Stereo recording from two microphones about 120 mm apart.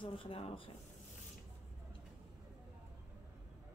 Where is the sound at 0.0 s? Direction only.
50° left (ahead or behind).